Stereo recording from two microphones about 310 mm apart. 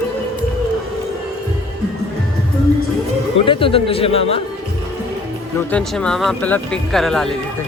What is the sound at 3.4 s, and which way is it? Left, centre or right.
Speech, centre.